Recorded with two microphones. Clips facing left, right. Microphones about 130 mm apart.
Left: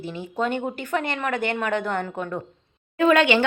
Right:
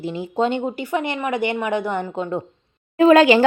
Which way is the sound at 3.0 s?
35° right (ahead or behind).